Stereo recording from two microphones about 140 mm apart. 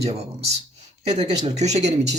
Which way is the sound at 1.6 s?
50° right (ahead or behind).